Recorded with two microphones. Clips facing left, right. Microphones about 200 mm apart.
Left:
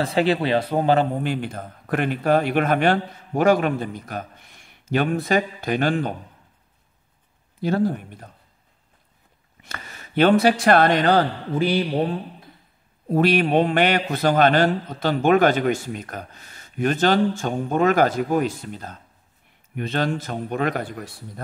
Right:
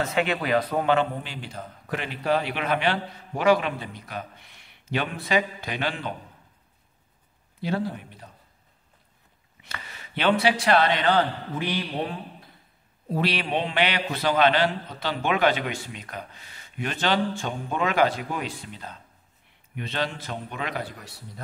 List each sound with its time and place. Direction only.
0.0 s a man's voice: 35° left (ahead or behind)
1.2 s a man's voice: 50° left (ahead or behind)
7.6 s a man's voice: 45° left (ahead or behind)
9.6 s a man's voice: 45° left (ahead or behind)
13.1 s a man's voice: 50° left (ahead or behind)